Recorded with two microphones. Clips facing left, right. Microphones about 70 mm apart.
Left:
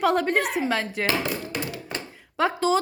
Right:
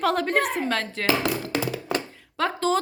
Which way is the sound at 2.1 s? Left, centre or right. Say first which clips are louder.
Left 2 dB; centre.